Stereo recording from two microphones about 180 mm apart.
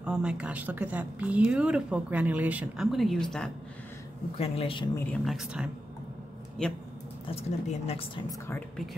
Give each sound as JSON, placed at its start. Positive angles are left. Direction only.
{"t": 0.0, "sound": "a woman's voice", "side_deg": -5}
{"t": 4.4, "sound": "speech", "side_deg": 30}
{"t": 4.9, "sound": "speech", "side_deg": 5}
{"t": 7.2, "sound": "speech", "side_deg": 35}
{"t": 8.3, "sound": "speech", "side_deg": 10}